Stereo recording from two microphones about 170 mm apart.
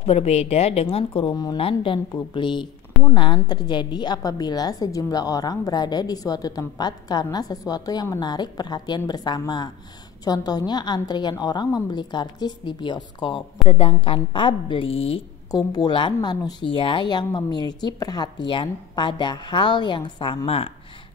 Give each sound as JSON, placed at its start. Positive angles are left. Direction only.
{"t": 0.0, "sound": "a woman's voice", "side_deg": 35}
{"t": 15.5, "sound": "a woman's voice", "side_deg": 25}